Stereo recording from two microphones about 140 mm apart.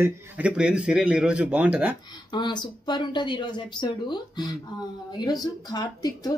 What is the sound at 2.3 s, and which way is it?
A woman's voice, 35° left (ahead or behind).